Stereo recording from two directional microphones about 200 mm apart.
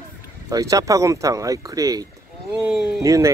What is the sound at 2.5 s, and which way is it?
Speech, 5° right (ahead or behind).